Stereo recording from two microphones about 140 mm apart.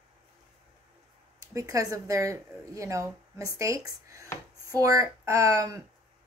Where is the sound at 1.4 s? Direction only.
25° right (ahead or behind).